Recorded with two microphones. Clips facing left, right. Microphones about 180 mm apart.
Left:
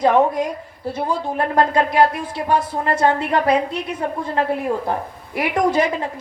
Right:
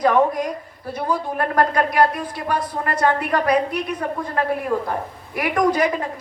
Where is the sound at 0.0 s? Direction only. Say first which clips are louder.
Left 2 dB; 25° left (ahead or behind).